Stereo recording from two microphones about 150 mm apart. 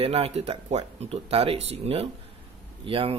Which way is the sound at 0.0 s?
40° right (ahead or behind).